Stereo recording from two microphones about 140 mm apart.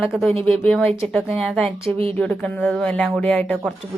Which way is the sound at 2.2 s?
5° left (ahead or behind).